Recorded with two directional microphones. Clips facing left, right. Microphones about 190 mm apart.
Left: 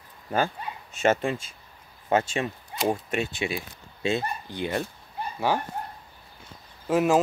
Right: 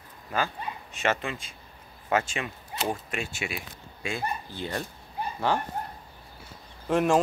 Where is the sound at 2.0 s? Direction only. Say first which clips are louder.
Left 3 dB; 30° left (ahead or behind); by 5.6 s 10° left (ahead or behind).